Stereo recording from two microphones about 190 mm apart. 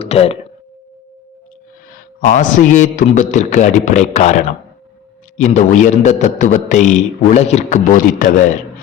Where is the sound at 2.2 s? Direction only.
40° left (ahead or behind).